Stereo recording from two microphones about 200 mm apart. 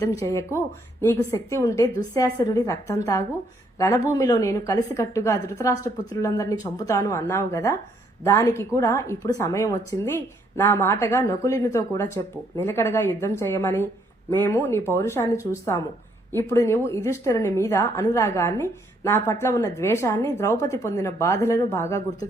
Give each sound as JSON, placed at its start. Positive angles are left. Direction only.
{"t": 0.0, "sound": "a woman's voice", "side_deg": 15}